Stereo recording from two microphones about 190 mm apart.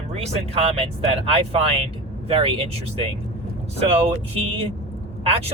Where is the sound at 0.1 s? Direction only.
35° right (ahead or behind).